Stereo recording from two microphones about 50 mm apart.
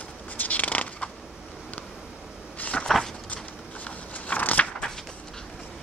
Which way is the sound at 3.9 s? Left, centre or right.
Left.